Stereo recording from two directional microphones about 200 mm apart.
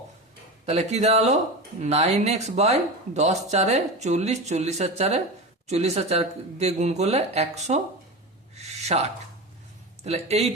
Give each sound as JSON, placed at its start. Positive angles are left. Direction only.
{"t": 0.6, "sound": "speech", "side_deg": -30}
{"t": 8.5, "sound": "a sound", "side_deg": -35}
{"t": 10.0, "sound": "speech", "side_deg": -30}